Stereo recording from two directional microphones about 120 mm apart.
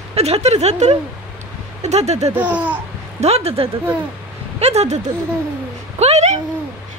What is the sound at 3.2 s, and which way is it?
A woman's voice, 60° right (ahead or behind).